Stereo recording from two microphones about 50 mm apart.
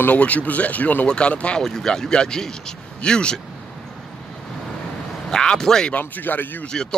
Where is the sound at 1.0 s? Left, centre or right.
Left.